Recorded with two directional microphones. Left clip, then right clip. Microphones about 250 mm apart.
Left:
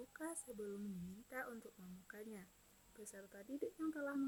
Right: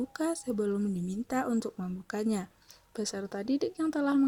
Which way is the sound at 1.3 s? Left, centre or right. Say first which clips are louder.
Right 17 dB; right.